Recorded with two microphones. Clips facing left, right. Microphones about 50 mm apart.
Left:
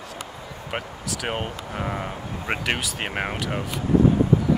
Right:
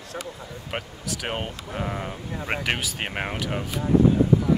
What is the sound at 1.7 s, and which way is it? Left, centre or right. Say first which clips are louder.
Speech: even; centre.